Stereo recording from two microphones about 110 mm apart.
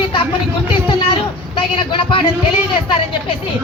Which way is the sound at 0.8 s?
50° left (ahead or behind).